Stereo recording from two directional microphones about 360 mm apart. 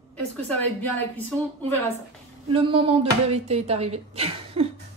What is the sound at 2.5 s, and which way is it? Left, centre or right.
Speech, centre.